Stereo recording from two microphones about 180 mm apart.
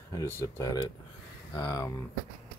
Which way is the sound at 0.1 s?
15° left (ahead or behind).